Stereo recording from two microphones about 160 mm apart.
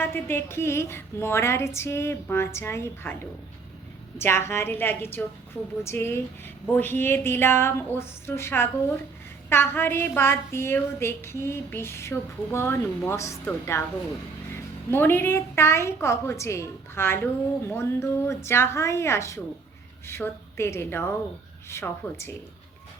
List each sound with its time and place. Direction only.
0.0 s a woman's voice: 15° left (ahead or behind)
4.2 s a woman's voice: 15° left (ahead or behind)